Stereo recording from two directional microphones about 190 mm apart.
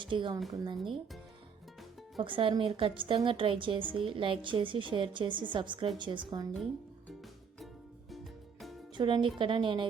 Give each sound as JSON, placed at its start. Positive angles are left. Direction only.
{"t": 0.0, "sound": "a woman's voice", "side_deg": -25}
{"t": 2.2, "sound": "a woman's voice", "side_deg": -25}
{"t": 8.1, "sound": "music", "side_deg": 0}
{"t": 9.0, "sound": "a woman's voice", "side_deg": -25}